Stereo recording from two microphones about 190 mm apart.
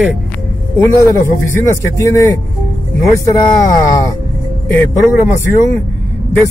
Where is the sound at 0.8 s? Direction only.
15° left (ahead or behind).